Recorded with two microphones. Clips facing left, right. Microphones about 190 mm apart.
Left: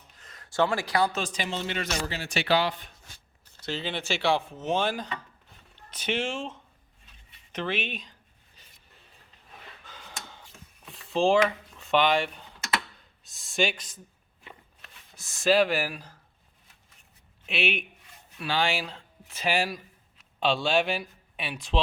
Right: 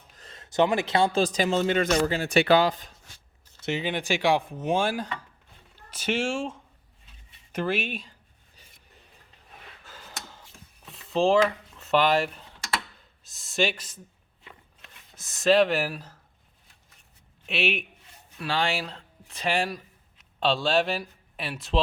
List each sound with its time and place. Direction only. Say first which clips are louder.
0.2 s speech: right 3 dB; 25° right (ahead or behind); by 2.8 s 45° right (ahead or behind)
3.7 s speech: right 4 dB; 15° right (ahead or behind)
9.8 s a sound: right 1 dB; 5° right (ahead or behind)
13.2 s speech: right 1 dB; centre (ahead or behind)
14.8 s a sound: right 1 dB; 20° right (ahead or behind)
15.4 s speech: right 2 dB; 5° left (ahead or behind)
17.4 s a man's voice: right 1 dB; centre (ahead or behind)